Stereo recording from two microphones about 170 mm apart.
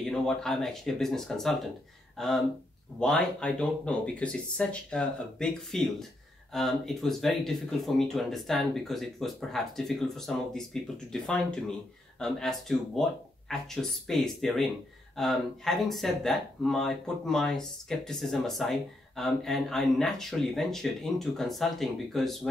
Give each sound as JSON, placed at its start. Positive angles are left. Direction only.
{"t": 0.0, "sound": "speech", "side_deg": 5}